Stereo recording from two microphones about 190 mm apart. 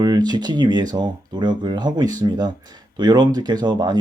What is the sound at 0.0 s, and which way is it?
Speech, 20° right (ahead or behind).